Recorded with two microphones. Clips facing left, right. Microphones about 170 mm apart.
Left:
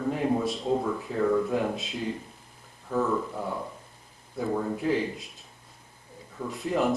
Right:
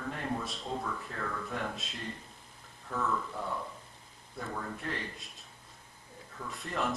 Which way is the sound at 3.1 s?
25° left (ahead or behind).